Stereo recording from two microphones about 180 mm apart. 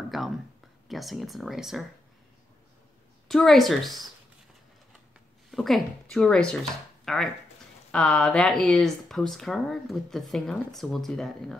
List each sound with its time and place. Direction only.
0.1 s speech: centre (ahead or behind)
3.3 s speech: centre (ahead or behind)
5.5 s speech: centre (ahead or behind)